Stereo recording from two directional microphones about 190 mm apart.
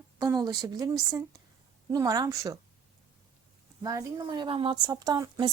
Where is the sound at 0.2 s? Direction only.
20° right (ahead or behind).